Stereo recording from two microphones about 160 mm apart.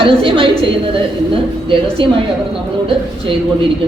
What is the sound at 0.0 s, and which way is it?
Speech, 35° right (ahead or behind).